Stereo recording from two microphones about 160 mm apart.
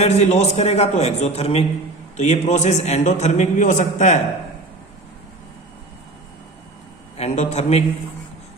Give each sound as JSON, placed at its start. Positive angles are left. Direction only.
{"t": 0.0, "sound": "a man's voice", "side_deg": 40}
{"t": 7.2, "sound": "a man's voice", "side_deg": 45}